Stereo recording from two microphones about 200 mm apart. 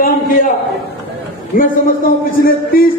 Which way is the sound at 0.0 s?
45° left (ahead or behind).